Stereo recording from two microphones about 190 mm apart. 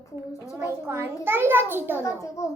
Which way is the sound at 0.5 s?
15° right (ahead or behind).